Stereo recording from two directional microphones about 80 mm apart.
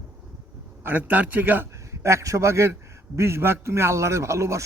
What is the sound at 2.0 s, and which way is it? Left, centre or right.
A man's voice, right.